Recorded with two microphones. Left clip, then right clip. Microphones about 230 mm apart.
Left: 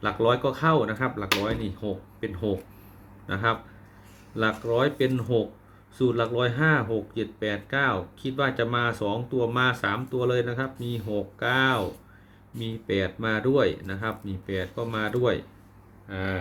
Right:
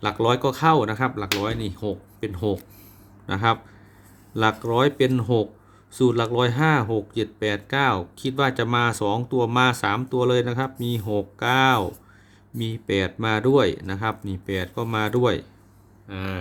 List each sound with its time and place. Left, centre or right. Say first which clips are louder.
0.0 s speech: right 2 dB; right